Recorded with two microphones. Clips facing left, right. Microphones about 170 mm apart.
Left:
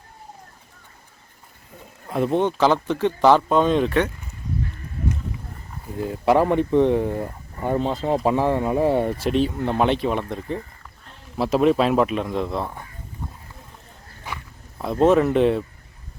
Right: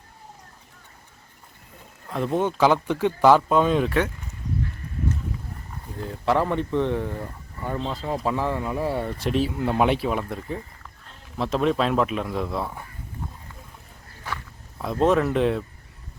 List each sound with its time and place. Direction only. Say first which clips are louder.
2.0 s speech: left 4 dB; 5° left (ahead or behind)
2.4 s speech: right 2 dB; 10° right (ahead or behind)
6.0 s speech: left 5 dB; 10° left (ahead or behind)
9.1 s speech: left 3 dB; centre (ahead or behind)
14.8 s speech: left 4 dB; centre (ahead or behind)